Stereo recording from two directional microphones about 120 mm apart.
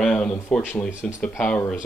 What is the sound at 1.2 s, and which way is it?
Speech, 10° left (ahead or behind).